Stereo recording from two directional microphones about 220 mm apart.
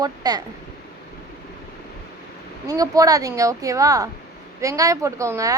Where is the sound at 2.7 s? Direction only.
15° right (ahead or behind).